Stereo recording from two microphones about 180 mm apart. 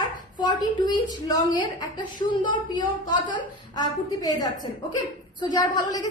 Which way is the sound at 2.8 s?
25° left (ahead or behind).